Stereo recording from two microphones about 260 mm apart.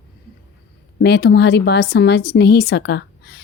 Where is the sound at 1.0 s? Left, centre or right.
Left.